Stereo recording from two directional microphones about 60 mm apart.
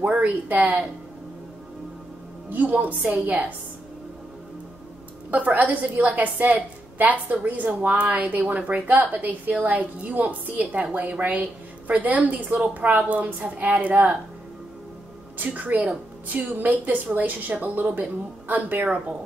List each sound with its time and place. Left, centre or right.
0.0 s speech: right
2.5 s a woman's voice: right
5.3 s a woman's voice: right
15.3 s a woman's voice: right